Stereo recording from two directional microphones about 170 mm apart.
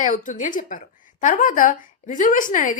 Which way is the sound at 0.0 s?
50° left (ahead or behind).